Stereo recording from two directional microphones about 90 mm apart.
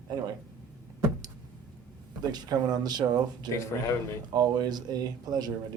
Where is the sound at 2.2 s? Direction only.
50° right (ahead or behind).